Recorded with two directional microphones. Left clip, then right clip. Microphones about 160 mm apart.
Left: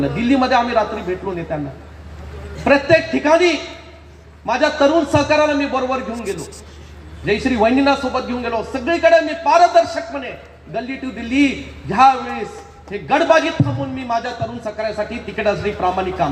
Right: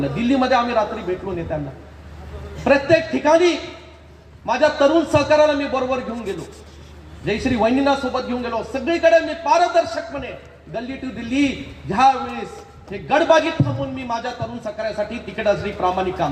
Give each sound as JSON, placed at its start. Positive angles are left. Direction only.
{"t": 0.0, "sound": "speech", "side_deg": -30}
{"t": 2.6, "sound": "speech", "side_deg": -30}
{"t": 7.3, "sound": "speech", "side_deg": -30}